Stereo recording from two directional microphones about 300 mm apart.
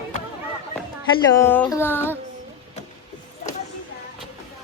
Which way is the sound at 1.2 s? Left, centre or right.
Centre.